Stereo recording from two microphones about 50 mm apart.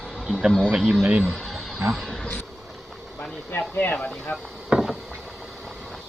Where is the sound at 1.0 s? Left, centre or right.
Right.